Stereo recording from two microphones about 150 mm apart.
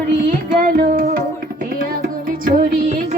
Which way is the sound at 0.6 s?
70° right (ahead or behind).